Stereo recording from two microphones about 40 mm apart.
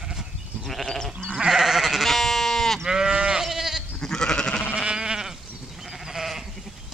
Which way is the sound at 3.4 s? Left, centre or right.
Centre.